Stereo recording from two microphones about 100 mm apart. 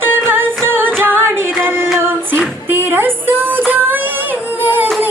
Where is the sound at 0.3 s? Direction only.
20° right (ahead or behind).